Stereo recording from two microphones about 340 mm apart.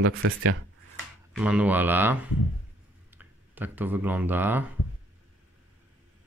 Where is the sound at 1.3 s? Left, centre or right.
Centre.